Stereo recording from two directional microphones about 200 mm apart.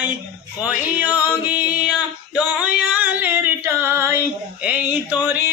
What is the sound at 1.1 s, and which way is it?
Singing, 5° right (ahead or behind).